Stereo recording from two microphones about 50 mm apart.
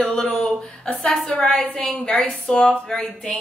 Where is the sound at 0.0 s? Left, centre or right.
Centre.